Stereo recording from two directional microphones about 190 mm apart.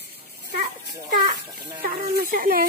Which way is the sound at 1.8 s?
50° right (ahead or behind).